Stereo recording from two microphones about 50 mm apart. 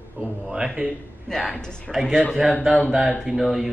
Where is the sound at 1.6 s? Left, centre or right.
Centre.